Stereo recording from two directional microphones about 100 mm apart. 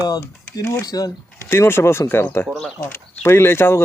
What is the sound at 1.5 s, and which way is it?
Speech, 25° left (ahead or behind).